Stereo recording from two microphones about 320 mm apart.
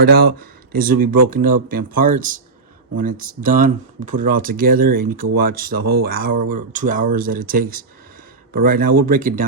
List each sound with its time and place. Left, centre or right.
0.0 s speech: right